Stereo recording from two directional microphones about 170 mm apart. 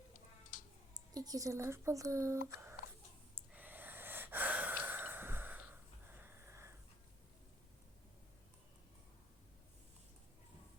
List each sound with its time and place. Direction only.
0.5 s a sound: 50° left (ahead or behind)
0.9 s speech: 20° right (ahead or behind)
3.3 s gasp: 10° right (ahead or behind)
6.1 s sniff: 10° right (ahead or behind)